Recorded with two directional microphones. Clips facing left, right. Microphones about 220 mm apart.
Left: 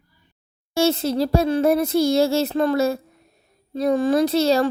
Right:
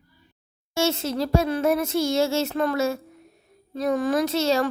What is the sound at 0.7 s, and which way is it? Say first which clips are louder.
A woman's voice: left 5 dB; 35° left (ahead or behind).